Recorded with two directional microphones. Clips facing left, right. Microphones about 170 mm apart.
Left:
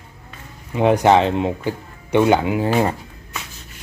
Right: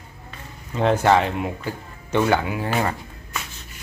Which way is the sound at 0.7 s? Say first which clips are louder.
Left 4 dB; 15° left (ahead or behind).